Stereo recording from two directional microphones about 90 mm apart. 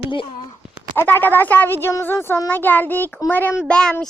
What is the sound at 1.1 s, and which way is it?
Child singing, 20° left (ahead or behind).